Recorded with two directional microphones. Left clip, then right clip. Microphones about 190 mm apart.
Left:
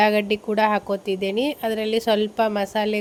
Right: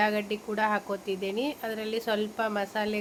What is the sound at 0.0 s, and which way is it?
Speech, 40° left (ahead or behind).